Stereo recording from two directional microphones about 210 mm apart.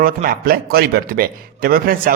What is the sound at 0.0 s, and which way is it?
A man's voice, 45° right (ahead or behind).